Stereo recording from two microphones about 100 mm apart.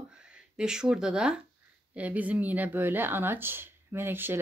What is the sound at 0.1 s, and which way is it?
Speech, 10° right (ahead or behind).